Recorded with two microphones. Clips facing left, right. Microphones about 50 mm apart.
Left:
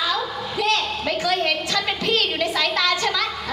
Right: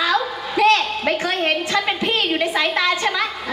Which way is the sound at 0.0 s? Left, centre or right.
Right.